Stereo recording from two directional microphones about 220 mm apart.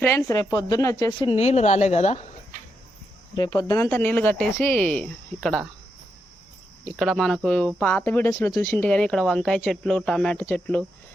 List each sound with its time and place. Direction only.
0.0 s speech: 15° left (ahead or behind)
1.4 s speech: 30° left (ahead or behind)
3.3 s speech: 20° left (ahead or behind)
6.8 s speech: centre (ahead or behind)